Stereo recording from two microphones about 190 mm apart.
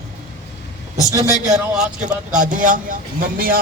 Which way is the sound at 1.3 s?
40° right (ahead or behind).